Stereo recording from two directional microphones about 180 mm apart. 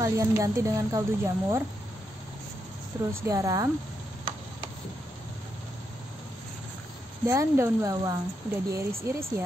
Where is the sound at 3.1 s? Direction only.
15° right (ahead or behind).